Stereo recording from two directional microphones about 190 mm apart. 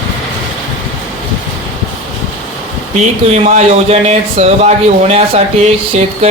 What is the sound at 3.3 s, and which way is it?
Speech, 35° right (ahead or behind).